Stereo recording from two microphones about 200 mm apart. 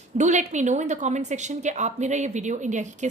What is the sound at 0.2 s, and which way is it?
Speech, 35° right (ahead or behind).